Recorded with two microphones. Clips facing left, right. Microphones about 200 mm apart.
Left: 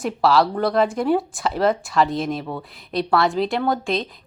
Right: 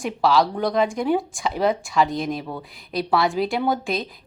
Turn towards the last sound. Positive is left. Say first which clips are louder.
# left 1 dB
turn(degrees=0)  # may be behind; listen again after turning